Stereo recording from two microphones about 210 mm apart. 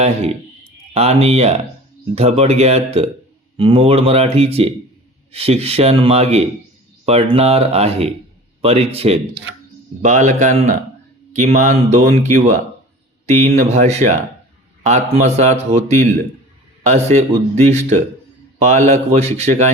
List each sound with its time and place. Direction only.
0.0 s speech: 30° right (ahead or behind)